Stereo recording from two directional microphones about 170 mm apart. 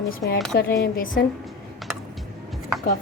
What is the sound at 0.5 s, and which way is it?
Speech, 90° left.